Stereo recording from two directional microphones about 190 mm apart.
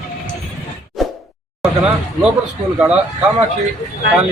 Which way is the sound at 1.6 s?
5° right (ahead or behind).